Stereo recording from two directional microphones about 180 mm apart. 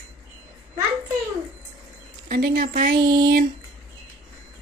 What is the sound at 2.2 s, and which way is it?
Speech, 55° right (ahead or behind).